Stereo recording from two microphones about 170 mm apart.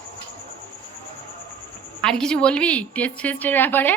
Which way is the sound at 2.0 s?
5° left (ahead or behind).